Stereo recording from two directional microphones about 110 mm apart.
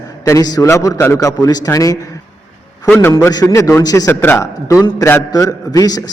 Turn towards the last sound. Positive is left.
turn(degrees=35)  # may be behind; listen again after turning